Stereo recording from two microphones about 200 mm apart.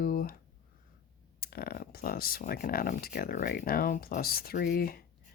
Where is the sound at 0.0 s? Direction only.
45° left (ahead or behind).